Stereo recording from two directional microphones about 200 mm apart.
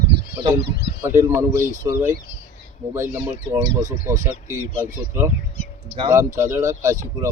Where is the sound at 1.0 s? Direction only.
15° right (ahead or behind).